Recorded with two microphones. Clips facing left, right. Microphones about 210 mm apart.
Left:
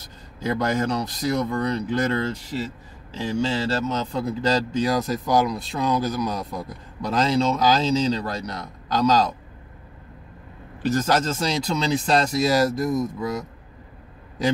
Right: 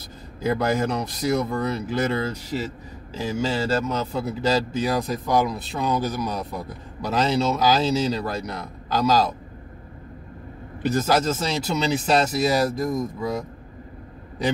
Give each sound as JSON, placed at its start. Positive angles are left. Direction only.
{"t": 0.4, "sound": "speech", "side_deg": -5}
{"t": 11.0, "sound": "speech", "side_deg": -5}